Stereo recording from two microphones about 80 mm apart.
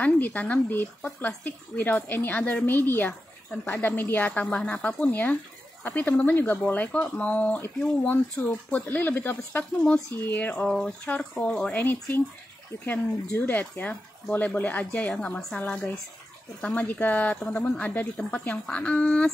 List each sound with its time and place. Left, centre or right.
0.0 s speech: centre
10.6 s speech: centre